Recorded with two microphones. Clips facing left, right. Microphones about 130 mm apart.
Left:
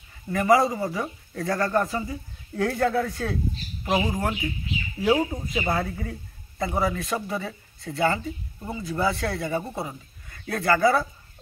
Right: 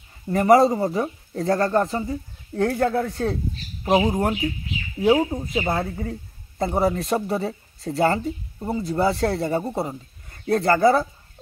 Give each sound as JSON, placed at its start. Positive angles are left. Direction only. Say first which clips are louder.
{"t": 0.3, "sound": "speech", "louder": "right 5 dB", "side_deg": -30}